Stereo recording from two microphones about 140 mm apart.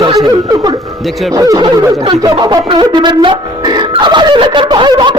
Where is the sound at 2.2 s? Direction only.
30° right (ahead or behind).